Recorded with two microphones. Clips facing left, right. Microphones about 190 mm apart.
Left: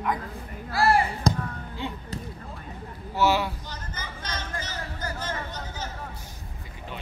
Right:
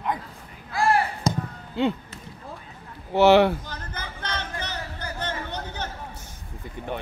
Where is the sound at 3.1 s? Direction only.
65° right (ahead or behind).